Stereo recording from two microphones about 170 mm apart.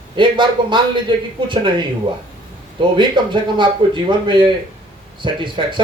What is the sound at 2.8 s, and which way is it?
A man's voice, 30° right (ahead or behind).